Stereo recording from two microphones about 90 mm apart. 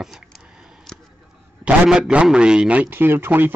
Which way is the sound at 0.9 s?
10° left (ahead or behind).